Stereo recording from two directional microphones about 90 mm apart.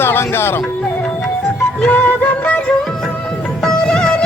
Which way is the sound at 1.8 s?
15° left (ahead or behind).